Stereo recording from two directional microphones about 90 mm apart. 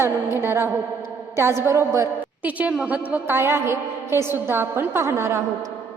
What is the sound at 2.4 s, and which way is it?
A woman's voice, 15° right (ahead or behind).